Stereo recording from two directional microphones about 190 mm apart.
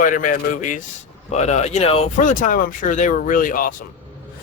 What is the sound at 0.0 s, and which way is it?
A man's voice, 45° left (ahead or behind).